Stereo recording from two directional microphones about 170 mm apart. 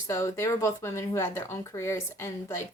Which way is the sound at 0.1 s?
15° left (ahead or behind).